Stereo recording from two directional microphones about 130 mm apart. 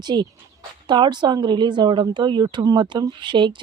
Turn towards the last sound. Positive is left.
turn(degrees=-40)  # may be behind; listen again after turning